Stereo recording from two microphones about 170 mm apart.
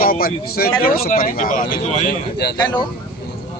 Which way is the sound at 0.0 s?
60° left (ahead or behind).